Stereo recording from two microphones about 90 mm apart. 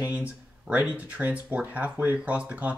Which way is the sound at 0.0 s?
15° right (ahead or behind).